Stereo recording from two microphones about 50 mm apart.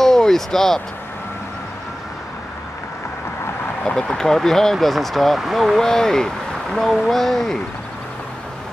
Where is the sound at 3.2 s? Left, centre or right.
Left.